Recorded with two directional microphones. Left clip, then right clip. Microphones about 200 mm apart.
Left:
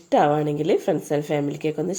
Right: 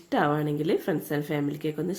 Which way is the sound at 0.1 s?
35° right (ahead or behind).